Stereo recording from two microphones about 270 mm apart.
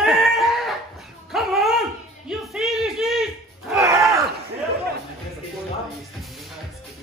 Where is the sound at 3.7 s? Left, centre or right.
Centre.